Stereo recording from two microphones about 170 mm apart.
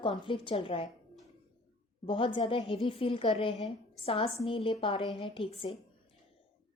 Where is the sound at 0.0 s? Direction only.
30° left (ahead or behind).